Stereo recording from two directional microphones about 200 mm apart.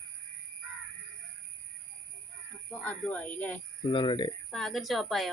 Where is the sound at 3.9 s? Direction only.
25° left (ahead or behind).